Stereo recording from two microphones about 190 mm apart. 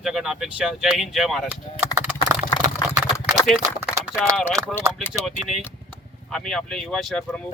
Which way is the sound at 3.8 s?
10° right (ahead or behind).